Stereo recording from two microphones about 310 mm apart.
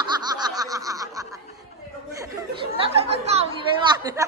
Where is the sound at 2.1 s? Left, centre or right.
Centre.